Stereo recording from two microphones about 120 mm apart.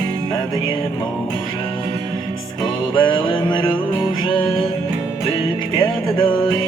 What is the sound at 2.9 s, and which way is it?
Music, 40° left (ahead or behind).